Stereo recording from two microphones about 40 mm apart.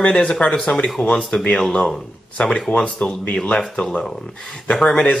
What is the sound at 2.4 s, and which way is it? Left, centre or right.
Speech, centre.